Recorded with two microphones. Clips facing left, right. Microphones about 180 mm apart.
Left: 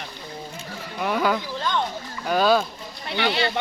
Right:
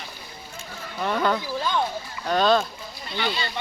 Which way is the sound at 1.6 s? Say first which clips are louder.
Even; 10° right (ahead or behind).